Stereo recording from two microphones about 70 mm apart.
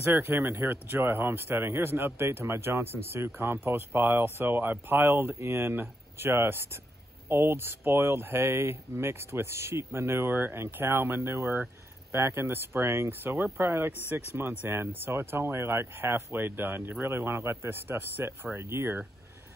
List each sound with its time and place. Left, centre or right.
0.0 s speech: right
0.7 s speech: right